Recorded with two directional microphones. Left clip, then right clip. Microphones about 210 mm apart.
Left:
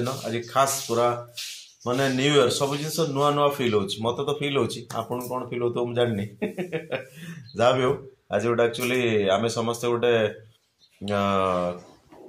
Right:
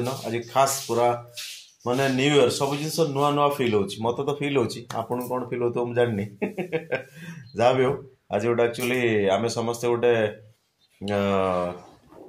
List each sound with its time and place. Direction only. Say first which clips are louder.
0.0 s a man's voice: even; 5° right (ahead or behind)